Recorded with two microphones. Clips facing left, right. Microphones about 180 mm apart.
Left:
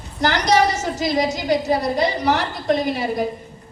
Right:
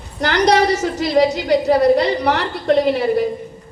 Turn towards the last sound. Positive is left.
turn(degrees=-65)  # may be behind; listen again after turning